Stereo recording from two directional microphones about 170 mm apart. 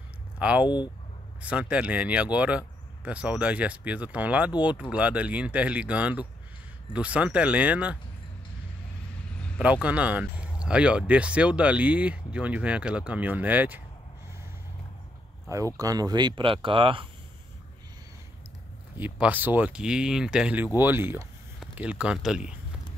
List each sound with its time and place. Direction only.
0.4 s speech: 5° right (ahead or behind)
9.6 s speech: 10° right (ahead or behind)
15.4 s speech: 20° right (ahead or behind)
18.9 s speech: 10° right (ahead or behind)